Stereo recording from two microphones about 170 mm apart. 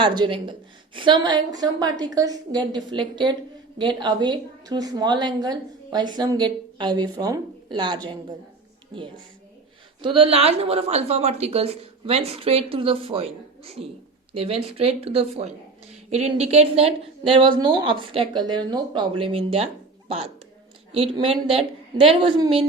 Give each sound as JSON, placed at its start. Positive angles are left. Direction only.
{"t": 0.0, "sound": "a woman's voice", "side_deg": -25}
{"t": 10.0, "sound": "a woman's voice", "side_deg": -30}